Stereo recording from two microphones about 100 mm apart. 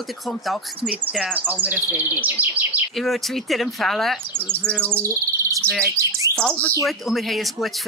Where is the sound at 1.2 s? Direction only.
15° right (ahead or behind).